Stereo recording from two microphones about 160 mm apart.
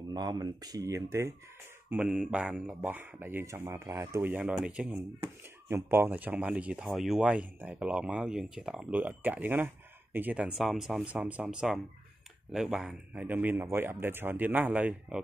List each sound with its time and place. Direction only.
0.1 s speech: 25° right (ahead or behind)
1.9 s speech: 5° right (ahead or behind)